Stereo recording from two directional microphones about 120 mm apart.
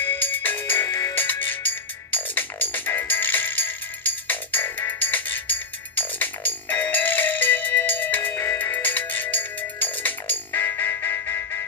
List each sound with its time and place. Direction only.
0.0 s music: 15° left (ahead or behind)